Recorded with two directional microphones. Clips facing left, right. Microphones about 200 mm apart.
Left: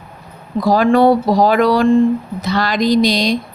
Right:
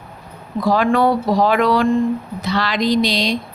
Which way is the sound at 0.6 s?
40° left (ahead or behind).